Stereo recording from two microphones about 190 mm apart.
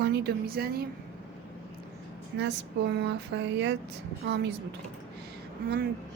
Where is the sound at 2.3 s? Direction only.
65° right (ahead or behind).